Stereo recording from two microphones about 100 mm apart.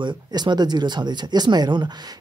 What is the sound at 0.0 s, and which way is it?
Speech, 45° right (ahead or behind).